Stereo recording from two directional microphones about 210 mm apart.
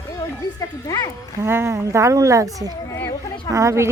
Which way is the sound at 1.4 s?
10° right (ahead or behind).